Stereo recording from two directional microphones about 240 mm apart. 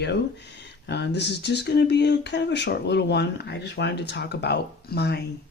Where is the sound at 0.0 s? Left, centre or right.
Left.